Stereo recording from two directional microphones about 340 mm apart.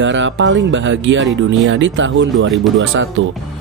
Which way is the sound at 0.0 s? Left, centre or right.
Right.